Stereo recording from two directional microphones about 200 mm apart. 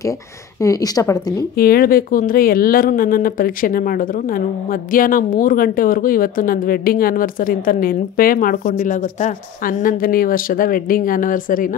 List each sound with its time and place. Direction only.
0.6 s a woman's voice: 15° left (ahead or behind)
1.6 s speech: 50° left (ahead or behind)